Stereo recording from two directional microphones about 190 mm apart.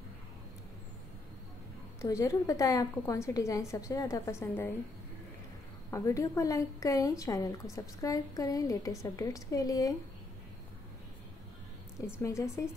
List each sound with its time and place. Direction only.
2.0 s a woman's voice: 15° left (ahead or behind)
5.9 s a woman's voice: 15° left (ahead or behind)
12.2 s a woman's voice: 15° left (ahead or behind)